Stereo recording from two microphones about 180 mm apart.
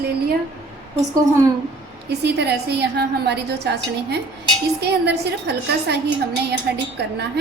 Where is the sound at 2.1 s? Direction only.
65° right (ahead or behind).